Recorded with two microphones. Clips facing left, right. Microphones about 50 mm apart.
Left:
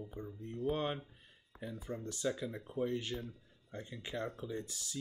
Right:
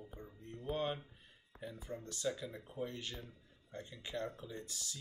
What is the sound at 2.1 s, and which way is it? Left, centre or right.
Speech, left.